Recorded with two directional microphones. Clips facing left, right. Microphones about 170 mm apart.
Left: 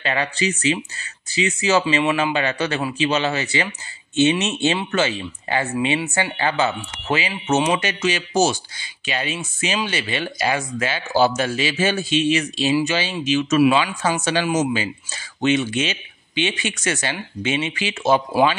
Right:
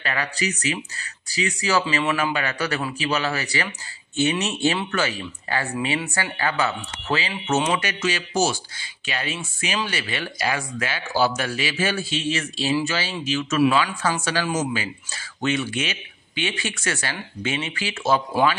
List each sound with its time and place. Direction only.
0.0 s speech: 25° left (ahead or behind)